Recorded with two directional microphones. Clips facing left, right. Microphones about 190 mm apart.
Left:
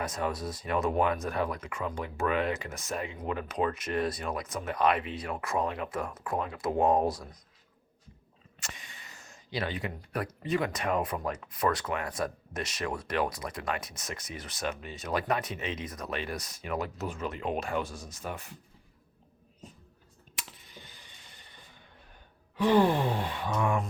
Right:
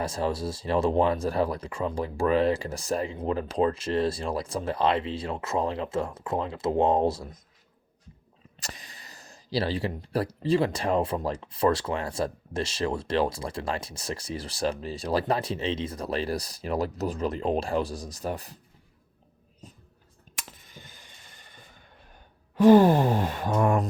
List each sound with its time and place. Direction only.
0.0 s speech: 30° right (ahead or behind)
8.6 s speech: 35° right (ahead or behind)
20.3 s clicking: 45° right (ahead or behind)
22.5 s speech: 45° right (ahead or behind)